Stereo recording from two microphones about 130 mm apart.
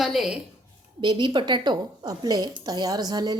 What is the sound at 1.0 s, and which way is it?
Speech, 35° right (ahead or behind).